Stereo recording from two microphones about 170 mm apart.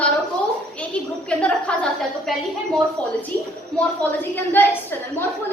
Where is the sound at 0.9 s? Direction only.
5° left (ahead or behind).